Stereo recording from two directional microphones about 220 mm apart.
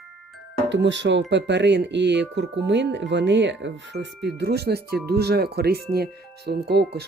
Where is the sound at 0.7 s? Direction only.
55° right (ahead or behind).